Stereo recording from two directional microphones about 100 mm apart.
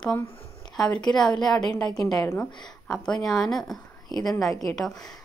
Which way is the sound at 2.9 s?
5° left (ahead or behind).